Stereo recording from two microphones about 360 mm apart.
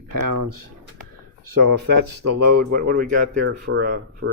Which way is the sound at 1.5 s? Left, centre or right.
Right.